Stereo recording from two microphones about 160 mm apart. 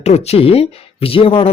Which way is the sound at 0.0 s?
40° left (ahead or behind).